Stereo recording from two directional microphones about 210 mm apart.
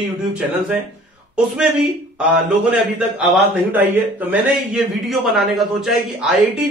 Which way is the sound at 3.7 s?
10° right (ahead or behind).